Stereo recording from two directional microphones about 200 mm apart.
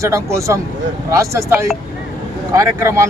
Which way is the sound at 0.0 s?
15° right (ahead or behind).